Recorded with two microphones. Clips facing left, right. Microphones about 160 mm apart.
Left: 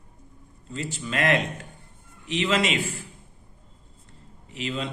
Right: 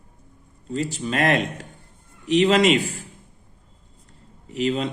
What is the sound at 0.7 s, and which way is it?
Mantra, 40° right (ahead or behind).